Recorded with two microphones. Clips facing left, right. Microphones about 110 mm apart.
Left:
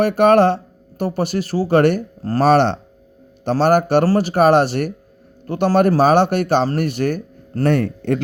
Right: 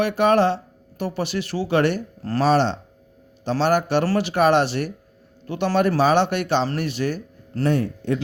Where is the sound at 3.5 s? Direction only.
45° left (ahead or behind).